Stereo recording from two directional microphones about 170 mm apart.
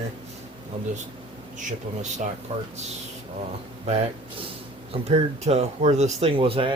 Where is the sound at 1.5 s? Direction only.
45° right (ahead or behind).